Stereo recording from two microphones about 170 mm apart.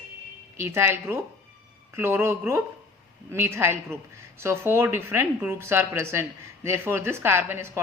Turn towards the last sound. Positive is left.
turn(degrees=-15)  # may be behind; listen again after turning